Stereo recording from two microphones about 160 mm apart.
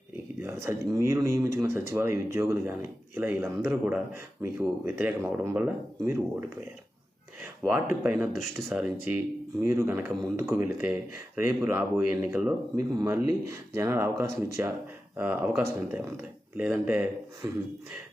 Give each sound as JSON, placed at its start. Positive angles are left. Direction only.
{"t": 0.4, "sound": "speech", "side_deg": -15}
{"t": 7.7, "sound": "speech", "side_deg": -10}
{"t": 10.2, "sound": "speech", "side_deg": 0}
{"t": 10.8, "sound": "speech", "side_deg": -10}
{"t": 12.7, "sound": "speech", "side_deg": -25}